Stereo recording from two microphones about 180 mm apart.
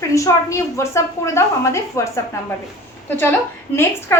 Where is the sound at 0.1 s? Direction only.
15° left (ahead or behind).